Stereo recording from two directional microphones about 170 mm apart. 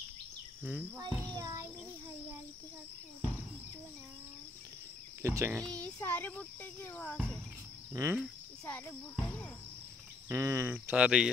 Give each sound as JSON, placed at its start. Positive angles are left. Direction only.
{"t": 0.7, "sound": "speech", "side_deg": -10}
{"t": 1.0, "sound": "a child's voice", "side_deg": -25}
{"t": 5.2, "sound": "speech", "side_deg": -15}
{"t": 5.6, "sound": "speech", "side_deg": 5}
{"t": 7.9, "sound": "speech", "side_deg": -15}
{"t": 8.2, "sound": "cricket", "side_deg": 5}
{"t": 10.2, "sound": "speech", "side_deg": -15}